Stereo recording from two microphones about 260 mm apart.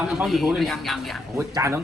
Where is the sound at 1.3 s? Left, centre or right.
Centre.